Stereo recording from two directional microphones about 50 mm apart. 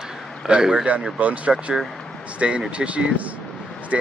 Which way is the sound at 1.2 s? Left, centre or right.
Right.